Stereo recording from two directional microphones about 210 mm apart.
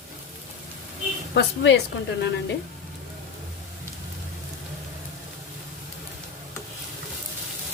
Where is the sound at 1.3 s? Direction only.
55° left (ahead or behind).